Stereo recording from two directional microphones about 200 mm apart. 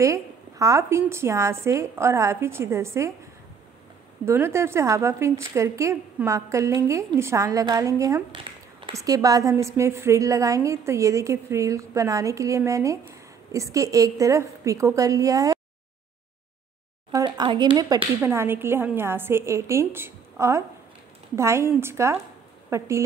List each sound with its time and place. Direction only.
0.0 s a woman's voice: 15° right (ahead or behind)
4.3 s a woman's voice: 15° right (ahead or behind)
17.1 s a woman's voice: 20° right (ahead or behind)